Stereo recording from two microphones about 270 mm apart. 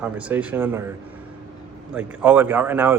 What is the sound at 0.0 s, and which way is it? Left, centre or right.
Speech, centre.